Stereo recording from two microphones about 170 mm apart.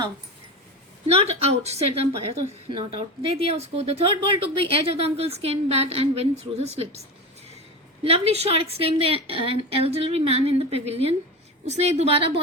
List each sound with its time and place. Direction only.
1.0 s a woman's voice: 35° right (ahead or behind)
8.0 s a woman's voice: 35° right (ahead or behind)